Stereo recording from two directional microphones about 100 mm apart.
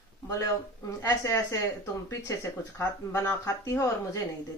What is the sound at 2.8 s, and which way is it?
Speech, 30° left (ahead or behind).